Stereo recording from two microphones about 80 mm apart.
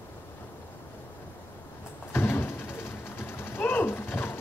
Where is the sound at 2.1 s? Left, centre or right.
Left.